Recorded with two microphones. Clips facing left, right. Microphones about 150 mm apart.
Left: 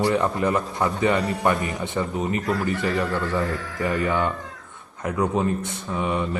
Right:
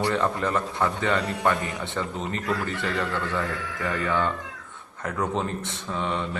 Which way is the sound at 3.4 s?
40° left (ahead or behind).